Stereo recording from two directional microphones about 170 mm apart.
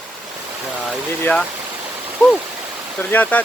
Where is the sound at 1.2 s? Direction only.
5° left (ahead or behind).